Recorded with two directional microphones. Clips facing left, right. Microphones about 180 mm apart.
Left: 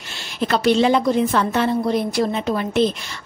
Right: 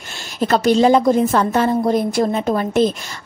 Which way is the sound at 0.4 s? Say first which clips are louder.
Right 3 dB; 40° right (ahead or behind).